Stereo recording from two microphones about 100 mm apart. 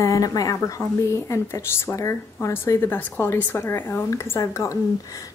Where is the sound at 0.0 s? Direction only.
35° left (ahead or behind).